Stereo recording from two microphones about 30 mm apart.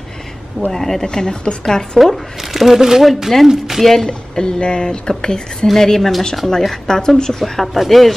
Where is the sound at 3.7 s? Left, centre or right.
Centre.